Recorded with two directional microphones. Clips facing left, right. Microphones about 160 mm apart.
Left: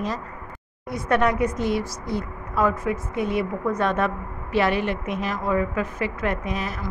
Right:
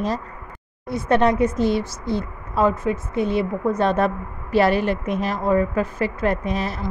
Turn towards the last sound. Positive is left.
turn(degrees=-35)  # may be behind; listen again after turning